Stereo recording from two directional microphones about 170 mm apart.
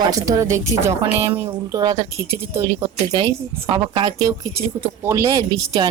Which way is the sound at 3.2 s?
30° right (ahead or behind).